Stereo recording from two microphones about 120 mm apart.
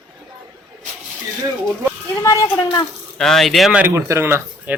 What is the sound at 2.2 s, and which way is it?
Speech, 25° left (ahead or behind).